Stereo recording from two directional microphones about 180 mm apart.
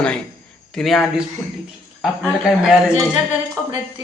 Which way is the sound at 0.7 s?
Centre (ahead or behind).